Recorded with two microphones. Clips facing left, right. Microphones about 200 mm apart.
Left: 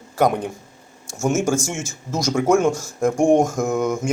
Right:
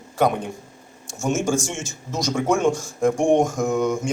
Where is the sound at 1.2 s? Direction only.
5° left (ahead or behind).